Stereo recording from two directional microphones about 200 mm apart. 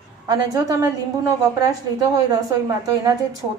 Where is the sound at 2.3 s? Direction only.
20° right (ahead or behind).